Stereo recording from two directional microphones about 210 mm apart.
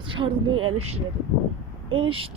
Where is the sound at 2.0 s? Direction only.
25° right (ahead or behind).